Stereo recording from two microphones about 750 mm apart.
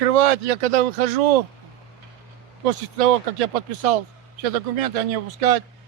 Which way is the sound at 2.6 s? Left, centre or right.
Right.